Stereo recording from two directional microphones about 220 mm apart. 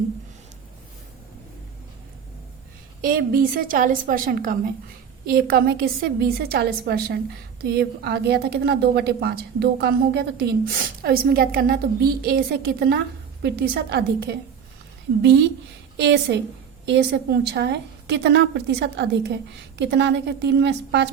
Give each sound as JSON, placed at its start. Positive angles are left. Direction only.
{"t": 3.0, "sound": "a woman's voice", "side_deg": -40}